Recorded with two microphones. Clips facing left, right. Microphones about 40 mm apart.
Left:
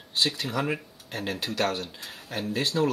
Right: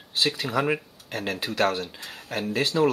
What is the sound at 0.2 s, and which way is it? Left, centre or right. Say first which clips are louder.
Speech: right 3 dB; centre.